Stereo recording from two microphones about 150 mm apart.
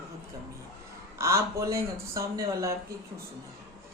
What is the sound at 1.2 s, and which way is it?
Speech, 20° right (ahead or behind).